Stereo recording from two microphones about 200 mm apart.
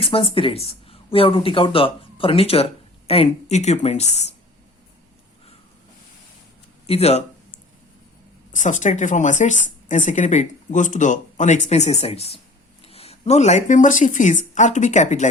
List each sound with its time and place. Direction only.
0.0 s speech: 25° left (ahead or behind)
6.8 s speech: 30° left (ahead or behind)
8.5 s speech: 35° left (ahead or behind)